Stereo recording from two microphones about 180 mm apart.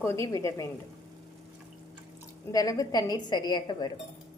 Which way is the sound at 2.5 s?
20° left (ahead or behind).